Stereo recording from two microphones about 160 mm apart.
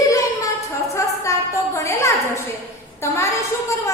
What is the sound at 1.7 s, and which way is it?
A woman's voice, 20° left (ahead or behind).